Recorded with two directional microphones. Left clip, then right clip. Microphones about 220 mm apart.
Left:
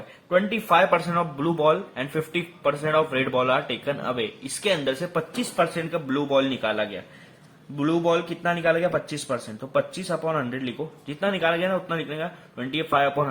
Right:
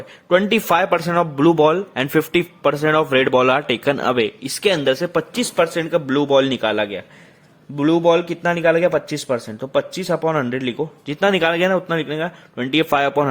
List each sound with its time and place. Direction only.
0.3 s a man's voice: 50° right (ahead or behind)